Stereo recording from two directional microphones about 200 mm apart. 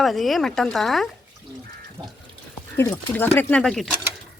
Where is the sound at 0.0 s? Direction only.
Centre (ahead or behind).